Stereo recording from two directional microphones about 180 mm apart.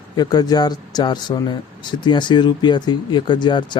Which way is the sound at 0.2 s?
20° left (ahead or behind).